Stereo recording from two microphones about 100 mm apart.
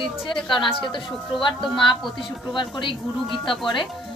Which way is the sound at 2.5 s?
50° left (ahead or behind).